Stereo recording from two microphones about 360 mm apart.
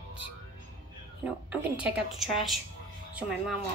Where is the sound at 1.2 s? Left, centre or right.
Centre.